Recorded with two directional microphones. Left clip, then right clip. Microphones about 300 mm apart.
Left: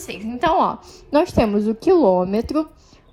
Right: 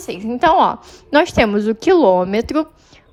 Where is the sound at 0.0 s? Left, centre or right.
Centre.